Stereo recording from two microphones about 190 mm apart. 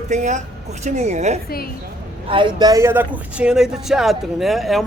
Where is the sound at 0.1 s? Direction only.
40° right (ahead or behind).